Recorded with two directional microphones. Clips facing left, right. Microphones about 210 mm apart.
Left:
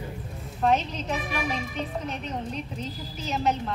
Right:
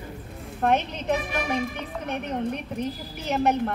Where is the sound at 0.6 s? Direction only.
60° right (ahead or behind).